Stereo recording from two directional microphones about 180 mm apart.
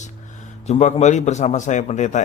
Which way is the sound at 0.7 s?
40° left (ahead or behind).